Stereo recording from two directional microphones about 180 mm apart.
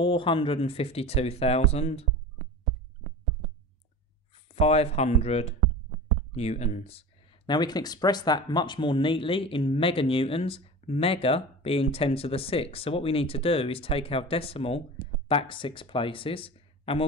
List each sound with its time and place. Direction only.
0.0 s speech: 30° left (ahead or behind)
4.6 s speech: 35° left (ahead or behind)